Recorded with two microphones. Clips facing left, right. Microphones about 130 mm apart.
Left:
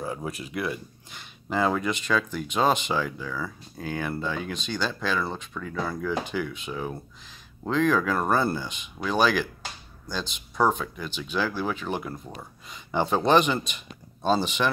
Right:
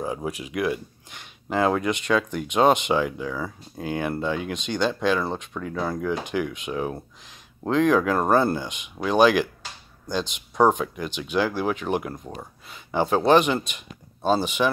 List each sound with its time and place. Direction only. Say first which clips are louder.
0.0 s speech: right 3 dB; 15° right (ahead or behind)